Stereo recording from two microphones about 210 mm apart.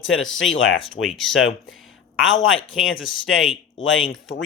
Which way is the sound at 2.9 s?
70° left (ahead or behind).